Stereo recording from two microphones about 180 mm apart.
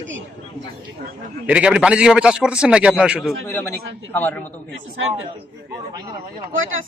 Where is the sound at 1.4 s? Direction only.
5° right (ahead or behind).